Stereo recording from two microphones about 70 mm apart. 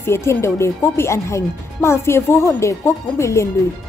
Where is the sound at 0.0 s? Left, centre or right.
Left.